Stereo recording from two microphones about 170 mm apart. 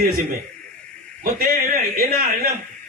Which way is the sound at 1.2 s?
55° right (ahead or behind).